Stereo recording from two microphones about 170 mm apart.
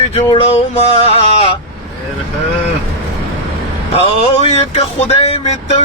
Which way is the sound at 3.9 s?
35° left (ahead or behind).